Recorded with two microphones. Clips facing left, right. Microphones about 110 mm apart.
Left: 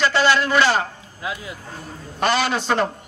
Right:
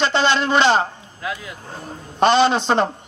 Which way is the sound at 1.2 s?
20° left (ahead or behind).